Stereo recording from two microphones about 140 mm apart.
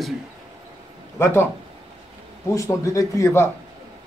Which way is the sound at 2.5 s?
20° left (ahead or behind).